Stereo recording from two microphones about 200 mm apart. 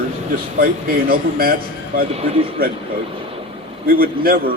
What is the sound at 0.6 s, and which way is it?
Speech, 45° right (ahead or behind).